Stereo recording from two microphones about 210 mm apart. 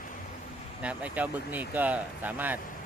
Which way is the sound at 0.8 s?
5° right (ahead or behind).